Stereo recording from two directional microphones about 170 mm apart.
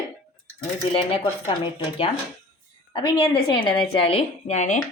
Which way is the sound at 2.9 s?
25° left (ahead or behind).